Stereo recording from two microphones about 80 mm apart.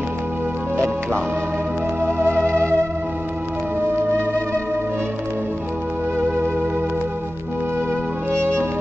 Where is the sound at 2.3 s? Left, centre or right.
Left.